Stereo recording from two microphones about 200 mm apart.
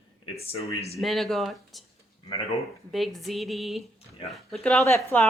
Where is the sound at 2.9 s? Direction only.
Centre (ahead or behind).